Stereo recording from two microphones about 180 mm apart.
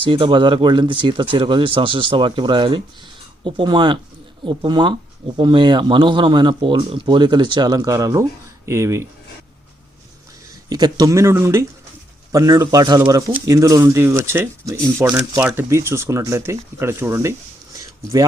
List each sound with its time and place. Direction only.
0.0 s speech: 25° right (ahead or behind)
10.7 s speech: 20° right (ahead or behind)
17.7 s a sound: 20° right (ahead or behind)